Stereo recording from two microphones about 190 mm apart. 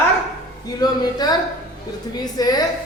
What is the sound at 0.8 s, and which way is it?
Speech, 20° left (ahead or behind).